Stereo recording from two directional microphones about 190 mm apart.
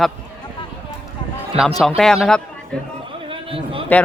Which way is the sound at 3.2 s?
30° right (ahead or behind).